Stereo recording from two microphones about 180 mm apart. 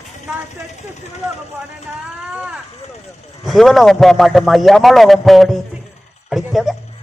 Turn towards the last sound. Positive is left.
turn(degrees=0)  # may be behind; listen again after turning